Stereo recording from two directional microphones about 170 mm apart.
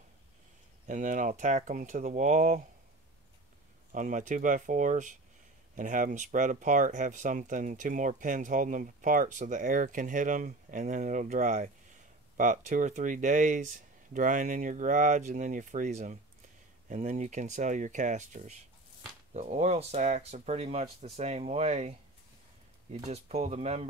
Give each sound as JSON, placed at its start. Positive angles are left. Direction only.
{"t": 0.8, "sound": "speech", "side_deg": -50}
{"t": 3.9, "sound": "speech", "side_deg": -50}
{"t": 23.0, "sound": "speech", "side_deg": -40}